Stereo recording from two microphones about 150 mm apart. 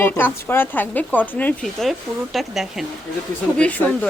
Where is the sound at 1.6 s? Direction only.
Centre (ahead or behind).